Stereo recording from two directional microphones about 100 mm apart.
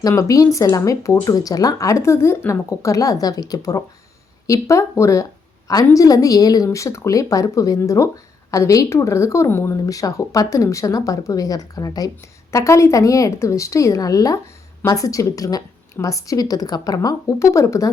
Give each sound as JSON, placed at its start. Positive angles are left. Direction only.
{"t": 0.2, "sound": "speech", "side_deg": 35}
{"t": 9.8, "sound": "speech", "side_deg": 35}